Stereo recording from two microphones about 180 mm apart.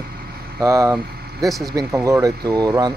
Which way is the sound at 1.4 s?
Centre (ahead or behind).